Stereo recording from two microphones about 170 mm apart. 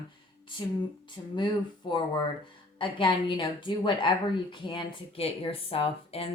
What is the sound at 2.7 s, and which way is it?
A woman's voice, 30° left (ahead or behind).